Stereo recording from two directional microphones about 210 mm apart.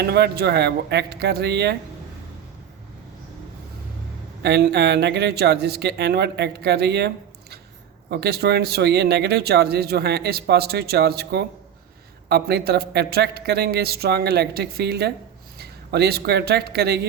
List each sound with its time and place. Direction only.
0.0 s speech: 50° right (ahead or behind)
4.4 s speech: 50° right (ahead or behind)
8.1 s speech: 50° right (ahead or behind)